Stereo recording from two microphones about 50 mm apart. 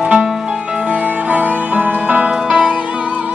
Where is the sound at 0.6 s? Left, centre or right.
Right.